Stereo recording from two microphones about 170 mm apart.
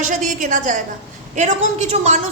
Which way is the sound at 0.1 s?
50° right (ahead or behind).